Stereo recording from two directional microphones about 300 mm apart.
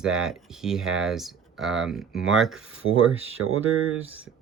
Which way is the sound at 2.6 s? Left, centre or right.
Right.